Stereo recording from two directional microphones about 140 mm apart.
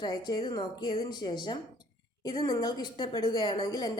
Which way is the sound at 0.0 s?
30° left (ahead or behind).